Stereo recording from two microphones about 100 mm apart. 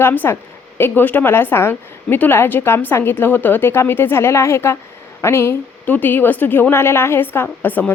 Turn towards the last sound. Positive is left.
turn(degrees=15)  # may be behind; listen again after turning